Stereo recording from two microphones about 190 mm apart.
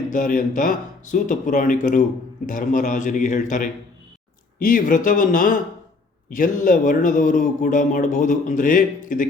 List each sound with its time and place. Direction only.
0.1 s a man's voice: 45° left (ahead or behind)